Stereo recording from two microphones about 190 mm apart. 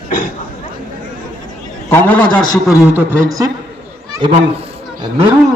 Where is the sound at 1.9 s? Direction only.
5° left (ahead or behind).